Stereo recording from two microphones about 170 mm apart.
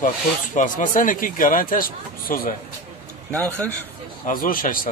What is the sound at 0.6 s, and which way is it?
Speech, 50° left (ahead or behind).